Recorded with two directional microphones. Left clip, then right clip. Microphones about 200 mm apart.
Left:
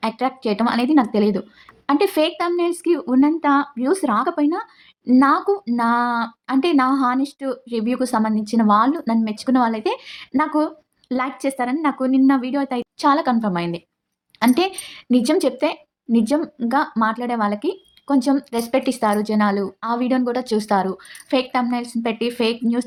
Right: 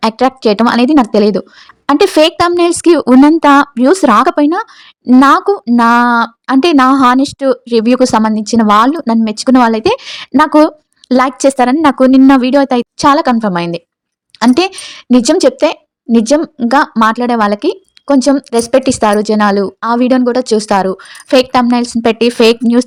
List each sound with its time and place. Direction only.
0.0 s speech: 50° right (ahead or behind)